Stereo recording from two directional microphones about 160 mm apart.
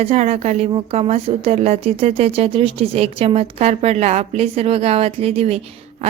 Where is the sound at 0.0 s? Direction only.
40° right (ahead or behind).